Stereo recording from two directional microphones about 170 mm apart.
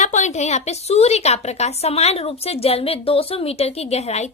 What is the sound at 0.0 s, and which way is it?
A woman's voice, 45° left (ahead or behind).